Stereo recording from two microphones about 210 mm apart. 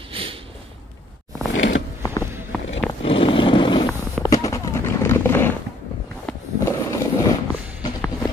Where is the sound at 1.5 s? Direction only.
60° left (ahead or behind).